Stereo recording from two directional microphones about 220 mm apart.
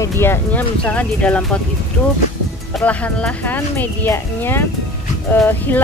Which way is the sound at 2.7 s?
5° left (ahead or behind).